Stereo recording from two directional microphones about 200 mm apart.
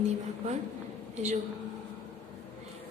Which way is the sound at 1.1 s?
35° right (ahead or behind).